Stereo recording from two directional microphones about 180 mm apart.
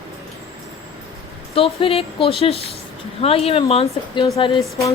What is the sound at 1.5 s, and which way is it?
Speech, 30° left (ahead or behind).